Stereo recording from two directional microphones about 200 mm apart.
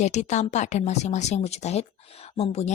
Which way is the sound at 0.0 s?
35° left (ahead or behind).